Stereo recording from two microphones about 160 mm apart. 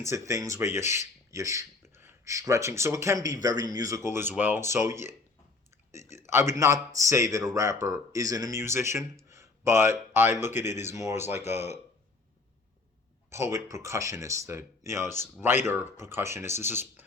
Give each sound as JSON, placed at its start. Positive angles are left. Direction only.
{"t": 0.1, "sound": "speech", "side_deg": -20}
{"t": 6.0, "sound": "speech", "side_deg": 45}
{"t": 6.2, "sound": "speech", "side_deg": -15}
{"t": 13.3, "sound": "speech", "side_deg": -15}